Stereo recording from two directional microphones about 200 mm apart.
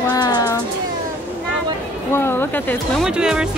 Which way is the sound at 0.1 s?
20° left (ahead or behind).